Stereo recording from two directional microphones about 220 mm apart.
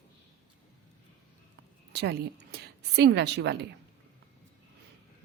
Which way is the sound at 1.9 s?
50° right (ahead or behind).